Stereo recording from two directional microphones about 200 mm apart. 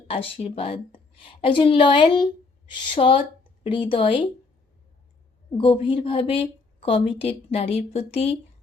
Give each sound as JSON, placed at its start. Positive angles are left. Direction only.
{"t": 0.1, "sound": "a woman's voice", "side_deg": 30}
{"t": 5.5, "sound": "a woman's voice", "side_deg": 25}